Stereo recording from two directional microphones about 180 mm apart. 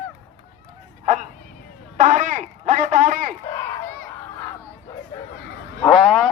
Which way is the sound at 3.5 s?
15° left (ahead or behind).